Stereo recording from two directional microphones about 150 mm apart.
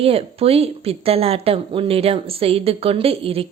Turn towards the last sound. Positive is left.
turn(degrees=-40)  # may be behind; listen again after turning